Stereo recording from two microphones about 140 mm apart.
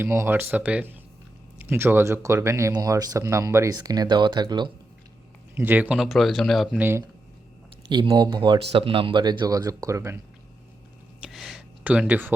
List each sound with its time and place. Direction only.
0.0 s speech: 15° right (ahead or behind)
5.5 s speech: 15° right (ahead or behind)
6.7 s speech: 15° right (ahead or behind)
7.9 s speech: 35° right (ahead or behind)
11.2 s a sound: centre (ahead or behind)